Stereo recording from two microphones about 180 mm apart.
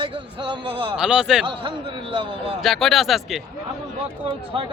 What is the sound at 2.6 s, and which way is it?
Speech, centre (ahead or behind).